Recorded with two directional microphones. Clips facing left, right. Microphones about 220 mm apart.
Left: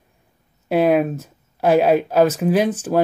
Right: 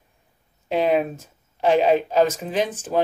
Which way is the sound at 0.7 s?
10° left (ahead or behind).